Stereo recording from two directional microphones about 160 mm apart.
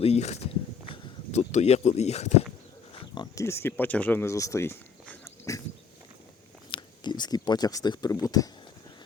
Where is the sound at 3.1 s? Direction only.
20° left (ahead or behind).